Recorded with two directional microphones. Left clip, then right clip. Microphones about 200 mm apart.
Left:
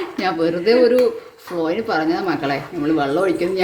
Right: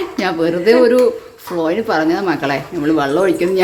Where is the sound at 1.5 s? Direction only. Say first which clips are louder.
Right 4 dB; 10° right (ahead or behind).